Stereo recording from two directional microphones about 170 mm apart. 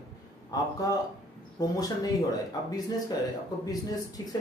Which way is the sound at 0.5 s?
20° left (ahead or behind).